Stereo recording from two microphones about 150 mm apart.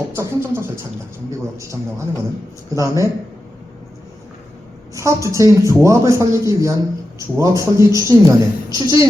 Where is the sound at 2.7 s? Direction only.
20° right (ahead or behind).